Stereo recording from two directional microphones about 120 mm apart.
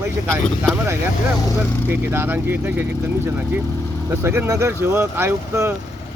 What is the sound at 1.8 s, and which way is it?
Speech, 20° right (ahead or behind).